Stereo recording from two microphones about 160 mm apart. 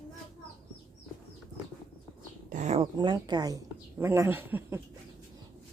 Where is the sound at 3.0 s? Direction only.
25° right (ahead or behind).